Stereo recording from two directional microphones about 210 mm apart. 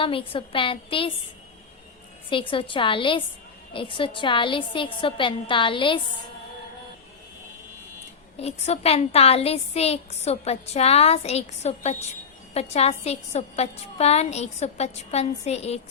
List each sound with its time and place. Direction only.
0.0 s a woman's voice: 25° left (ahead or behind)
2.3 s a woman's voice: 25° left (ahead or behind)
8.4 s a woman's voice: 30° left (ahead or behind)